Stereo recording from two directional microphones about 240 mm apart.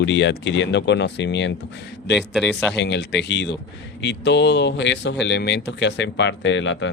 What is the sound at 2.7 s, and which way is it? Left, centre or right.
Speech, left.